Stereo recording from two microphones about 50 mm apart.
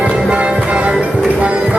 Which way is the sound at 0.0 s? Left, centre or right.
Centre.